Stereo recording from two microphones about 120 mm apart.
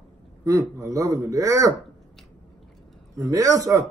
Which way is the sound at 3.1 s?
30° right (ahead or behind).